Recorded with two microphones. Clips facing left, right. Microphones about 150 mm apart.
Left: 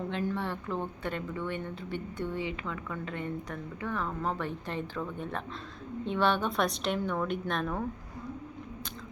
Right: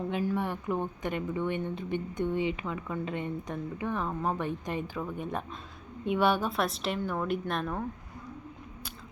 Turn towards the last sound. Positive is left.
turn(degrees=0)  # may be behind; listen again after turning